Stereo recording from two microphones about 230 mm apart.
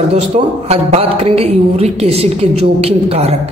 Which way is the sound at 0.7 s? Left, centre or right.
Right.